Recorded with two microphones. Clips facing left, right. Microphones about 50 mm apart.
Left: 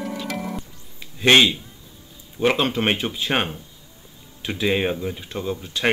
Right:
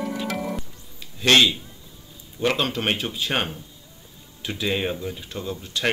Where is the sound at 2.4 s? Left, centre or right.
Centre.